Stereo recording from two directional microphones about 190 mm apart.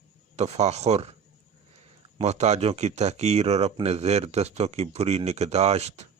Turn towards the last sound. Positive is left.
turn(degrees=-35)  # may be behind; listen again after turning